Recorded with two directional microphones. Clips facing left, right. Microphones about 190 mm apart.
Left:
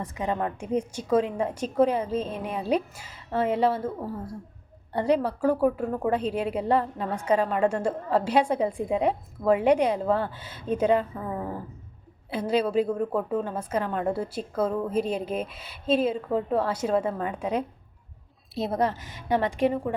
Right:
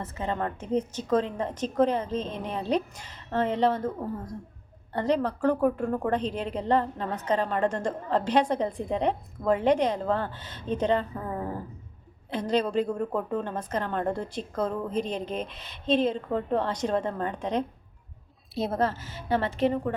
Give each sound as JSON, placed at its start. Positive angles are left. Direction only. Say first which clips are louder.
{"t": 0.0, "sound": "a woman's voice", "louder": "left 2 dB", "side_deg": 15}
{"t": 18.8, "sound": "a woman's voice", "louder": "left 1 dB", "side_deg": 15}